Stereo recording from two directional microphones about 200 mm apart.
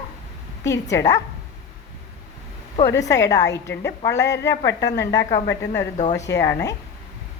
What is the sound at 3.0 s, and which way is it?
Speech, 15° left (ahead or behind).